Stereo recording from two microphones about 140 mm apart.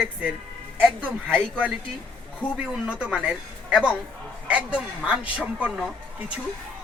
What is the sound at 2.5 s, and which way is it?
A man's voice, 5° right (ahead or behind).